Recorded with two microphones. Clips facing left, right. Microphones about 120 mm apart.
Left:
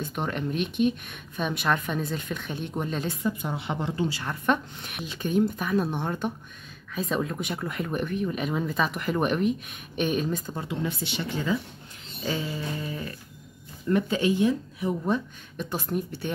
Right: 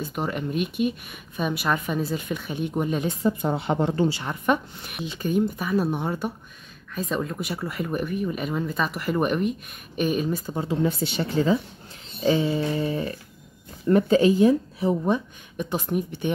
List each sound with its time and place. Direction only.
0.0 s speech: 5° right (ahead or behind)
3.3 s speech: 50° right (ahead or behind)
4.2 s speech: 15° right (ahead or behind)
5.2 s speech: centre (ahead or behind)
10.7 s speech: 40° right (ahead or behind)
12.3 s a sound: 20° right (ahead or behind)
12.8 s speech: 30° right (ahead or behind)
15.0 s speech: 15° right (ahead or behind)